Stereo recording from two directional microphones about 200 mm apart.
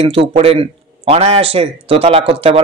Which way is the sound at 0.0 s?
25° right (ahead or behind).